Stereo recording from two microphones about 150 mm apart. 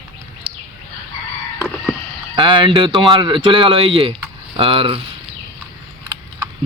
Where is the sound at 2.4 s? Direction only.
30° right (ahead or behind).